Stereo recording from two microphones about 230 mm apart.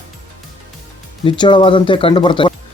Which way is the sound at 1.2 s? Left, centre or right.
Left.